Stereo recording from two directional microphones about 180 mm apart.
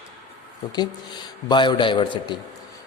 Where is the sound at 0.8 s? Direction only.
25° left (ahead or behind).